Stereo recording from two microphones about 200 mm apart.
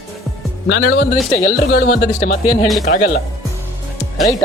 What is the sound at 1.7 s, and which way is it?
Speech, 55° left (ahead or behind).